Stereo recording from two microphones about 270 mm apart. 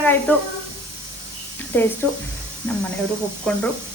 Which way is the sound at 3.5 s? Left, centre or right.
Centre.